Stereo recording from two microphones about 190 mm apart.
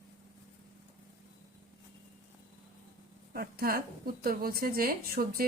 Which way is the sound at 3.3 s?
50° right (ahead or behind).